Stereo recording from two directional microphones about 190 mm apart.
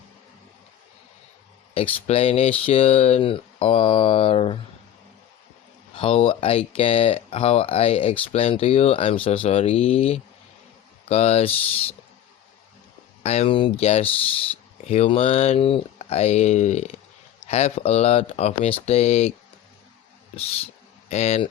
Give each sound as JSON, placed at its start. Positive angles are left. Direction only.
{"t": 1.7, "sound": "speech", "side_deg": 30}
{"t": 5.9, "sound": "speech", "side_deg": 30}
{"t": 13.2, "sound": "speech", "side_deg": 35}
{"t": 21.1, "sound": "speech", "side_deg": 35}